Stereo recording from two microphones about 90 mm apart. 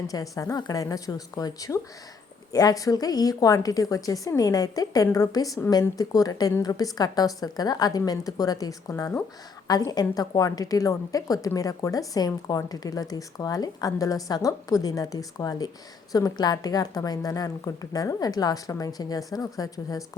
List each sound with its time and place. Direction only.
0.1 s a woman's voice: 40° left (ahead or behind)